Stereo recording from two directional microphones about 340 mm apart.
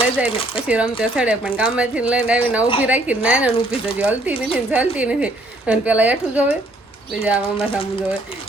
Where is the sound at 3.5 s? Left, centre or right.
Centre.